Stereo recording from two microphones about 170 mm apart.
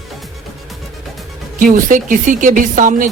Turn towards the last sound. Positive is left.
turn(degrees=-50)  # may be behind; listen again after turning